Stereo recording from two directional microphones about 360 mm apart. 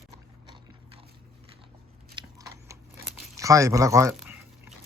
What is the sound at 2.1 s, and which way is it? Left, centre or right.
Crunch, centre.